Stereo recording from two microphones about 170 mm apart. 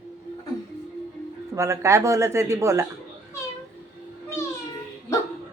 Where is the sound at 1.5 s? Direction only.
20° right (ahead or behind).